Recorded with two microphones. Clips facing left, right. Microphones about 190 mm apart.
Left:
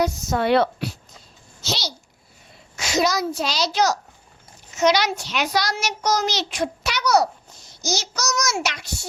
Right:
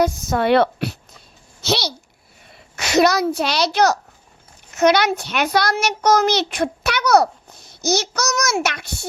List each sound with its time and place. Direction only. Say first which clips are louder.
0.0 s a child's voice: right 3 dB; 55° right (ahead or behind)